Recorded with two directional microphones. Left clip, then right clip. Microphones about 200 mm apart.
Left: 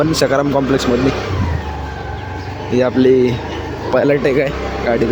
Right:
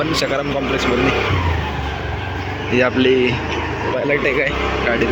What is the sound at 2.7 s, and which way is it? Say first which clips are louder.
Speech: left 3 dB; 35° left (ahead or behind).